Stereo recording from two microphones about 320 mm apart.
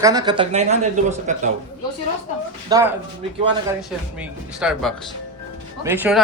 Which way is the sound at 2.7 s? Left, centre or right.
Centre.